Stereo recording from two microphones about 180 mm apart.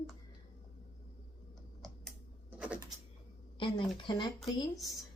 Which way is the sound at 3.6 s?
25° left (ahead or behind).